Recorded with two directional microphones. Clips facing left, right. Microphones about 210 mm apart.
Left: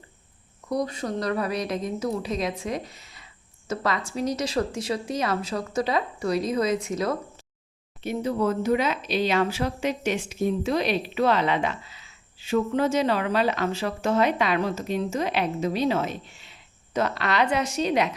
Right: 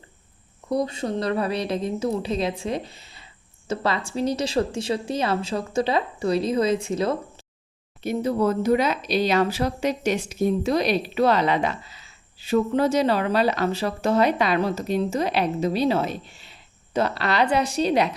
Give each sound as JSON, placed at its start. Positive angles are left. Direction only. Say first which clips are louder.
{"t": 0.7, "sound": "speech", "louder": "right 3 dB", "side_deg": -25}
{"t": 8.0, "sound": "speech", "louder": "right 3 dB", "side_deg": -40}